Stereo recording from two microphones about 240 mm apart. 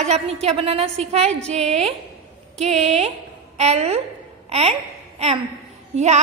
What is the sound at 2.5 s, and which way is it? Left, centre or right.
A woman's voice, right.